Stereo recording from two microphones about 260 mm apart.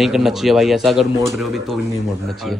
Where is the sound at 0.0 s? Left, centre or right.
Centre.